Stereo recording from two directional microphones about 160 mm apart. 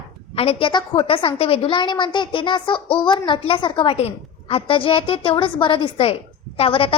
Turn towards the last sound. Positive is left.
turn(degrees=35)  # may be behind; listen again after turning